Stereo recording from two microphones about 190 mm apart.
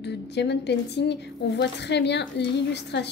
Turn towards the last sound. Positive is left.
turn(degrees=65)  # may be behind; listen again after turning